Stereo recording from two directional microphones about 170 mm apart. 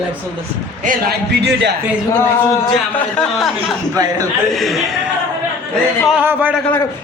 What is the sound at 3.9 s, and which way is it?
Speech, 20° right (ahead or behind).